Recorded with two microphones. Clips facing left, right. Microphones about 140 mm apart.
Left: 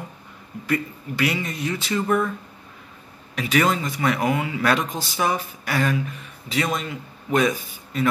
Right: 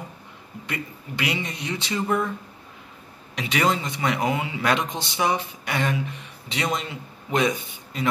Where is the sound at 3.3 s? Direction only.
25° right (ahead or behind).